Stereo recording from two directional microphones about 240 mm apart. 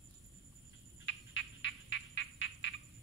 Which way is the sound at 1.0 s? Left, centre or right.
Left.